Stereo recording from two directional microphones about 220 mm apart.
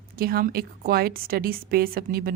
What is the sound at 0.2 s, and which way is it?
A woman's voice, 45° right (ahead or behind).